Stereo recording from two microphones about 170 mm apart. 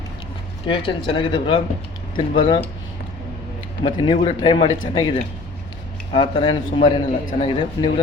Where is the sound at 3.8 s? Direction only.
30° left (ahead or behind).